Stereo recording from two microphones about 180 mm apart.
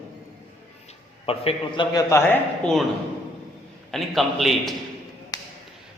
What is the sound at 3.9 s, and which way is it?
Speech, centre (ahead or behind).